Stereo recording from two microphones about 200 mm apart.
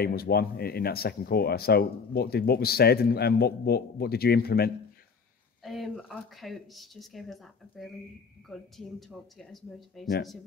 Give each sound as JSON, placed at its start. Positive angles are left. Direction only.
{"t": 0.0, "sound": "speech", "side_deg": 50}
{"t": 5.6, "sound": "speech", "side_deg": 0}